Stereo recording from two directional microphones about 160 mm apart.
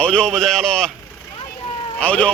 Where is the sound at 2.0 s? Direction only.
10° left (ahead or behind).